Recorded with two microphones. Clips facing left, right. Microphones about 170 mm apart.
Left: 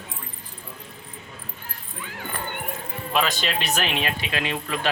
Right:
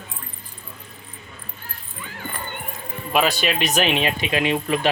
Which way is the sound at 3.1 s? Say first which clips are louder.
Right 4 dB; 10° right (ahead or behind).